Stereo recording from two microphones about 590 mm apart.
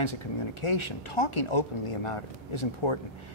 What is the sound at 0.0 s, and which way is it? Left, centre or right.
Speech, left.